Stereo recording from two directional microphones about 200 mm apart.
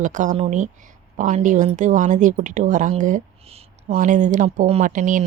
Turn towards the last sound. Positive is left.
turn(degrees=-40)  # may be behind; listen again after turning